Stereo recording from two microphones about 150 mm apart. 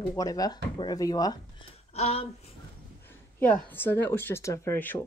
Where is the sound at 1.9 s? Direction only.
40° left (ahead or behind).